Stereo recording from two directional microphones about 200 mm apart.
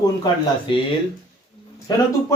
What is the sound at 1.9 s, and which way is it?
Speech, 20° left (ahead or behind).